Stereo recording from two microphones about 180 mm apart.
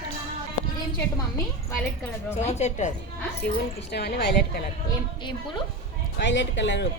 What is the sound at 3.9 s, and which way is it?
Speech, 65° left (ahead or behind).